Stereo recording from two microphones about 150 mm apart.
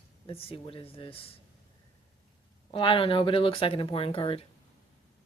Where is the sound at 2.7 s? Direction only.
35° left (ahead or behind).